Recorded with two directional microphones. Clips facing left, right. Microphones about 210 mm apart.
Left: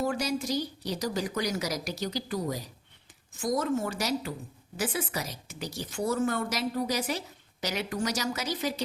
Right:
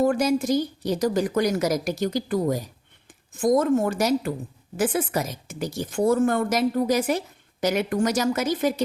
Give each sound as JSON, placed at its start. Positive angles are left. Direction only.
{"t": 0.0, "sound": "a woman's voice", "side_deg": -50}